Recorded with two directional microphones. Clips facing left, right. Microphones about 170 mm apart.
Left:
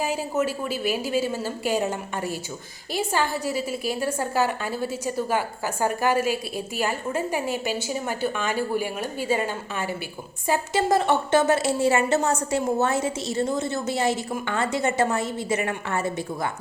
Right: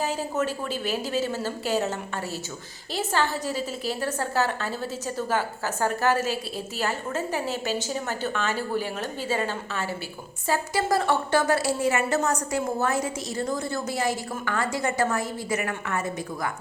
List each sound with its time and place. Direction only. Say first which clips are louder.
0.0 s a woman's voice: left 2 dB; 10° left (ahead or behind); by 16.5 s 30° left (ahead or behind)